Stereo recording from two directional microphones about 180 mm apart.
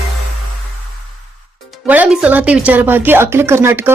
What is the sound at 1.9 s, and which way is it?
A woman's voice, 5° right (ahead or behind).